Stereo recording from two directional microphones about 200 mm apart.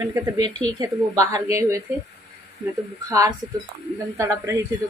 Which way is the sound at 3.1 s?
15° right (ahead or behind).